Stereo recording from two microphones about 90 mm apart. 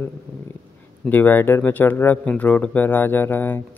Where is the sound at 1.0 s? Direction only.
20° left (ahead or behind).